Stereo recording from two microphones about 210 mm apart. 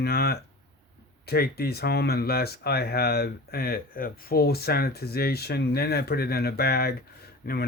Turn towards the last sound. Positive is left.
turn(degrees=45)  # may be behind; listen again after turning